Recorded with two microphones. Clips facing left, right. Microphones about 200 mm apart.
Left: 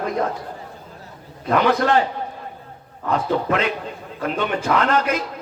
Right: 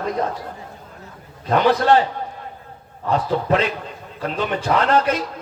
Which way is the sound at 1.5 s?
30° right (ahead or behind).